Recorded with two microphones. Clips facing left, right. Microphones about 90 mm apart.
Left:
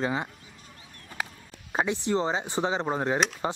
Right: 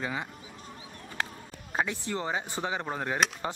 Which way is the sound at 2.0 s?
25° left (ahead or behind).